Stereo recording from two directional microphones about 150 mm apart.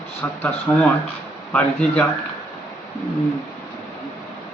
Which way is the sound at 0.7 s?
15° left (ahead or behind).